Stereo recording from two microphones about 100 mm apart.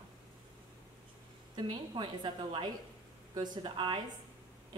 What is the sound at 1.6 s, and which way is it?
A woman's voice, 50° right (ahead or behind).